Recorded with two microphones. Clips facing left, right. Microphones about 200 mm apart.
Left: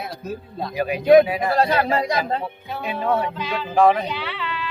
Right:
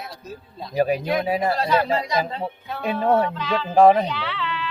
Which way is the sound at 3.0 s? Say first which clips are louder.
Right 3 dB; 40° right (ahead or behind).